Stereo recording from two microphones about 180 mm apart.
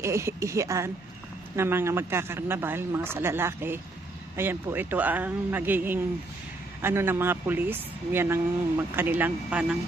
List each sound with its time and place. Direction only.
0.0 s speech: 15° right (ahead or behind)